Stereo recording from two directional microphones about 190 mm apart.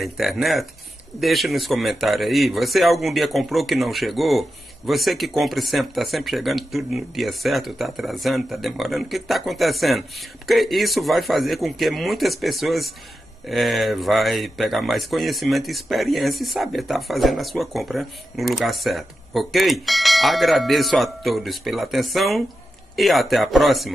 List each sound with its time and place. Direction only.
0.0 s speech: centre (ahead or behind)